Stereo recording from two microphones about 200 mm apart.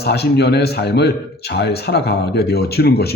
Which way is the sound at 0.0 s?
55° left (ahead or behind).